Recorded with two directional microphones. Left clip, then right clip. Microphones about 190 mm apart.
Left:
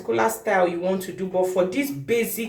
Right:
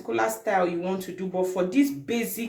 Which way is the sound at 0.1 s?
30° right (ahead or behind).